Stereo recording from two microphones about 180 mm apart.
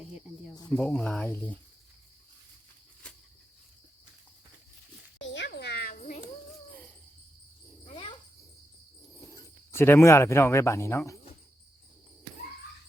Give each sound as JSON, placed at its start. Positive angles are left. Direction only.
{"t": 0.7, "sound": "speech", "side_deg": 5}
{"t": 5.2, "sound": "a sound", "side_deg": 85}
{"t": 9.3, "sound": "speech", "side_deg": 15}